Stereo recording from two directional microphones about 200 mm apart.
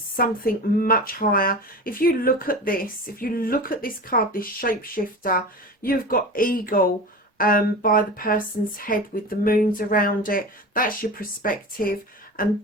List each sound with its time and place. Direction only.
0.2 s speech: 45° left (ahead or behind)